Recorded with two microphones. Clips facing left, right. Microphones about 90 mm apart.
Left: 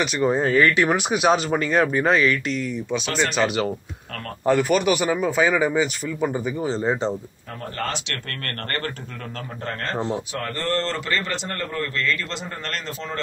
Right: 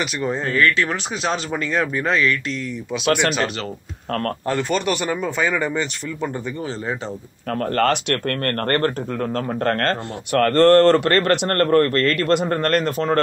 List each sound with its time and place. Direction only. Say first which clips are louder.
0.0 s speech: left 3 dB; 5° left (ahead or behind)
3.1 s speech: right 7 dB; 60° right (ahead or behind)
3.3 s a man's voice: left 3 dB; 5° left (ahead or behind)
6.7 s speech: left 5 dB; 20° left (ahead or behind)
7.7 s speech: right 10 dB; 65° right (ahead or behind)
8.1 s speech: right 10 dB; 45° right (ahead or behind)
9.7 s speech: right 1 dB; 70° right (ahead or behind); by 13.2 s 55° right (ahead or behind)